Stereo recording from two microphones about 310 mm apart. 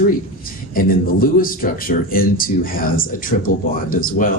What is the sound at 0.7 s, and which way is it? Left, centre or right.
Speech, left.